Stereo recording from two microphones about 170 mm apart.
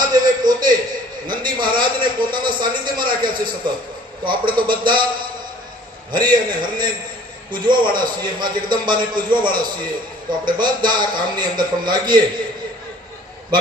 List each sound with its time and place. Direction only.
0.0 s a sound: 25° right (ahead or behind)
1.3 s a man's voice: 25° right (ahead or behind)
6.1 s a man's voice: 25° right (ahead or behind)